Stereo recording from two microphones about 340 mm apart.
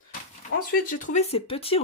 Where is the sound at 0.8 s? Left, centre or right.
Left.